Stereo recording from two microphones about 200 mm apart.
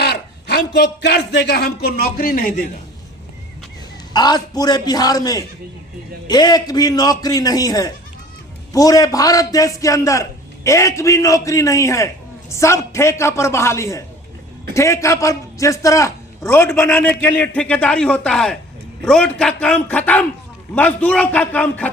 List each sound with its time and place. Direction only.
0.0 s speech: 55° left (ahead or behind)
4.1 s a man's voice: 20° left (ahead or behind)